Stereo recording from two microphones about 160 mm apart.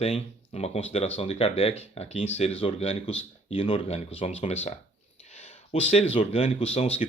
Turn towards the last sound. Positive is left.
turn(degrees=40)  # may be behind; listen again after turning